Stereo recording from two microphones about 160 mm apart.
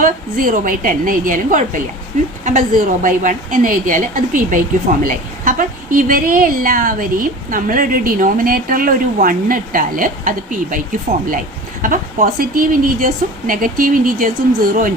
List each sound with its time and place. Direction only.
0.0 s a woman's voice: 60° right (ahead or behind)